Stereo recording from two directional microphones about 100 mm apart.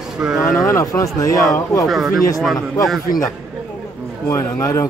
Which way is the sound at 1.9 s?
Centre (ahead or behind).